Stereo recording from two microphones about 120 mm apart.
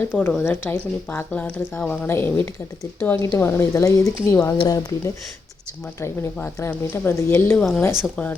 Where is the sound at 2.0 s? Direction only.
20° left (ahead or behind).